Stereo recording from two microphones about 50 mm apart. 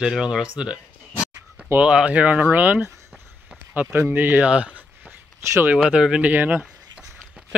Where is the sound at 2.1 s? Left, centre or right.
Right.